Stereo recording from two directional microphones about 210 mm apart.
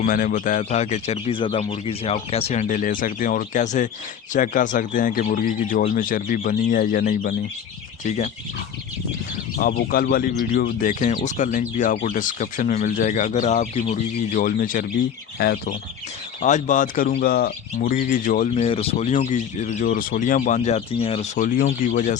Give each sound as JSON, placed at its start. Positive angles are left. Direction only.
{"t": 0.0, "sound": "speech", "side_deg": 40}
{"t": 9.6, "sound": "speech", "side_deg": 45}
{"t": 16.4, "sound": "speech", "side_deg": 35}
{"t": 18.5, "sound": "speech", "side_deg": 30}